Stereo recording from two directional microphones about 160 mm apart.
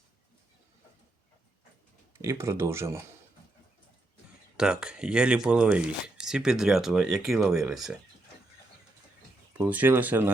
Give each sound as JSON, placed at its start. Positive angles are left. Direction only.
{"t": 2.4, "sound": "speech", "side_deg": -15}
{"t": 4.5, "sound": "speech", "side_deg": -5}
{"t": 9.5, "sound": "speech", "side_deg": -10}